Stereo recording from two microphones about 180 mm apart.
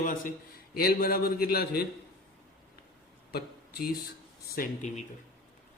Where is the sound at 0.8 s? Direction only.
55° left (ahead or behind).